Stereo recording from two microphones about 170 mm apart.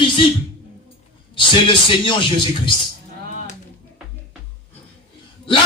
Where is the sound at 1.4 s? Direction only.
30° left (ahead or behind).